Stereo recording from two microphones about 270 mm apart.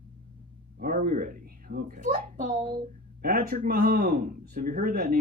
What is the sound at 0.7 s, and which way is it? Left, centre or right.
Speech, right.